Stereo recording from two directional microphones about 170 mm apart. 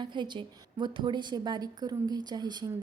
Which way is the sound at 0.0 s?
25° right (ahead or behind).